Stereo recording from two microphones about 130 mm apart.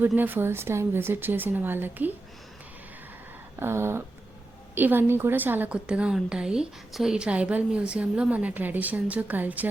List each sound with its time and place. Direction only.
0.2 s a woman's voice: 15° right (ahead or behind)
3.6 s a sound: 20° right (ahead or behind)
4.7 s a woman's voice: 15° right (ahead or behind)